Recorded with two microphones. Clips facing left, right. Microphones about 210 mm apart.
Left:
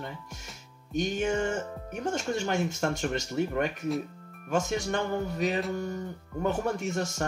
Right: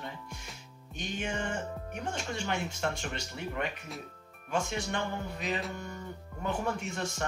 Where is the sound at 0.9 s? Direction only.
45° left (ahead or behind).